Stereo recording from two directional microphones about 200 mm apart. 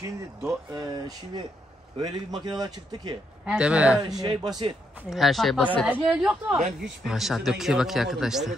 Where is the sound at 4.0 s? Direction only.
20° right (ahead or behind).